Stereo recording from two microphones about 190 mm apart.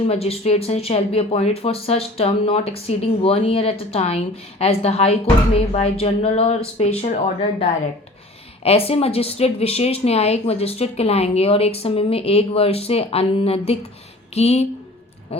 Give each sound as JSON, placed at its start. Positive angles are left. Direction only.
{"t": 0.1, "sound": "speech", "side_deg": 30}
{"t": 8.6, "sound": "speech", "side_deg": 30}